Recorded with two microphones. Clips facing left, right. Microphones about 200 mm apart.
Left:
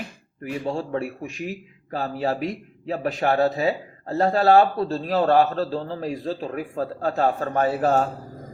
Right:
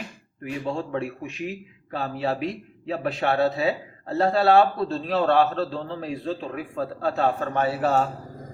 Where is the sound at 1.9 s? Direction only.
40° left (ahead or behind).